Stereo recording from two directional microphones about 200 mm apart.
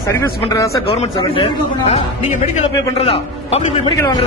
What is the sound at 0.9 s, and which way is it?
A man's voice, 25° left (ahead or behind).